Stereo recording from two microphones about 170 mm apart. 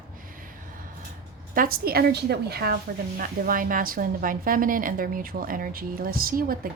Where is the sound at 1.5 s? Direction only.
60° right (ahead or behind).